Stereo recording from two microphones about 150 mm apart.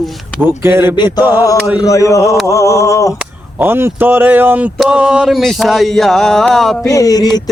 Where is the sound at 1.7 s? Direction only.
20° left (ahead or behind).